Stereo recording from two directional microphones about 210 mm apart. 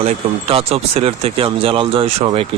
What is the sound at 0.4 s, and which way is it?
Speech, 25° right (ahead or behind).